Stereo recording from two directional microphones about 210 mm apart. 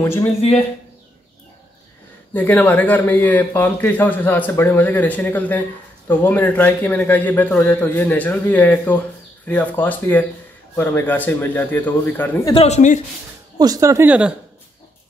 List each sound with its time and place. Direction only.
0.0 s speech: 10° left (ahead or behind)
0.4 s speech: 30° left (ahead or behind)
2.3 s speech: 10° left (ahead or behind)
12.5 s speech: 30° left (ahead or behind)
13.6 s speech: 15° right (ahead or behind)